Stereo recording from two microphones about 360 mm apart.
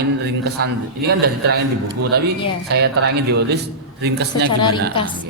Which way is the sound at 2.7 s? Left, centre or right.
Right.